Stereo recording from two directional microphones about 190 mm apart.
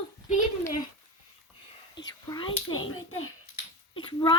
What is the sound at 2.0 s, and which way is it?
Whispering, 70° left (ahead or behind).